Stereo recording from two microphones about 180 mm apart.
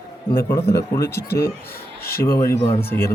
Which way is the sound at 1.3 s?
55° left (ahead or behind).